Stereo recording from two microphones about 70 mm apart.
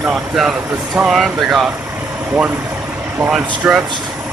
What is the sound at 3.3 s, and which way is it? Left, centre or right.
Speech, centre.